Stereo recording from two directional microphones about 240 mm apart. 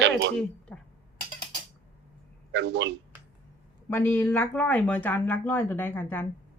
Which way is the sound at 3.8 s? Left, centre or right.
Centre.